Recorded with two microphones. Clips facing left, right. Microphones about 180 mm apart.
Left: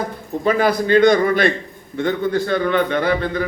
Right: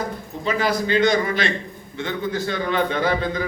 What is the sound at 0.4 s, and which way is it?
A man's voice, 55° left (ahead or behind).